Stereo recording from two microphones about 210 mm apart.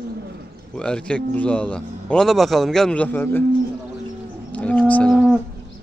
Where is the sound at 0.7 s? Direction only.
5° left (ahead or behind).